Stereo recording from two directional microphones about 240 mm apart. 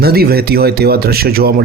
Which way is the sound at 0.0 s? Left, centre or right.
Right.